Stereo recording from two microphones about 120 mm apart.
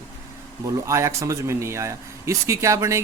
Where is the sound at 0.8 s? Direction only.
25° right (ahead or behind).